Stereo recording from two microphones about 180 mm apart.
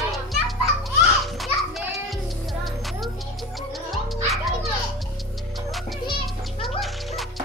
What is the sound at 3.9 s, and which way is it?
Music, centre (ahead or behind).